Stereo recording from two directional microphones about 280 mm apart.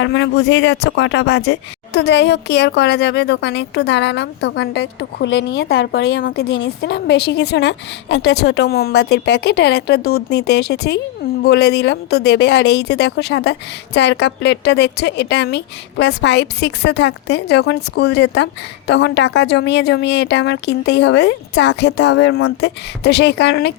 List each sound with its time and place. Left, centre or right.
0.0 s speech: left